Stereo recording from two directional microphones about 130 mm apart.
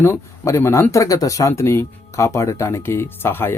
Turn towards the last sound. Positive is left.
turn(degrees=15)  # may be behind; listen again after turning